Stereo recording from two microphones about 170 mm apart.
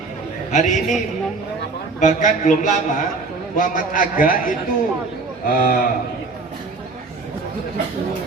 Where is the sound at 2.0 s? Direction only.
45° left (ahead or behind).